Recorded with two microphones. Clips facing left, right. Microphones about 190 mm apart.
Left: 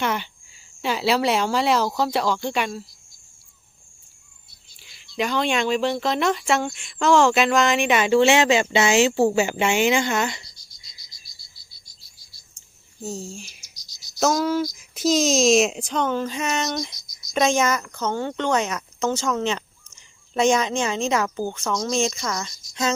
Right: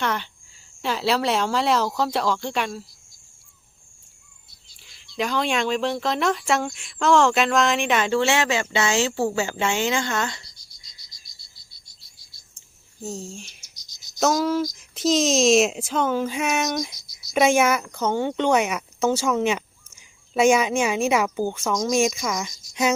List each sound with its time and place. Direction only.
0.0 s speech: 10° left (ahead or behind)
4.8 s speech: centre (ahead or behind)
8.2 s speech: 20° left (ahead or behind)
13.0 s a child's voice: centre (ahead or behind)